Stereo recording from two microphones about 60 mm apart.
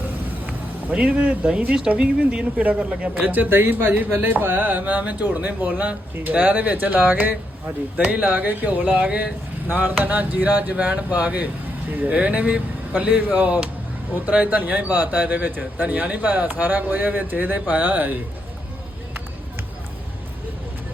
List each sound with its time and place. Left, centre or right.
0.4 s speech: right
3.2 s speech: right
9.6 s speech: right